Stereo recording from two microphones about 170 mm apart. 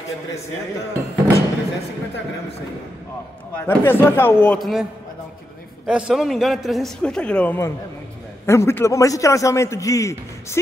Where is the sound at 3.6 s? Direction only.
15° left (ahead or behind).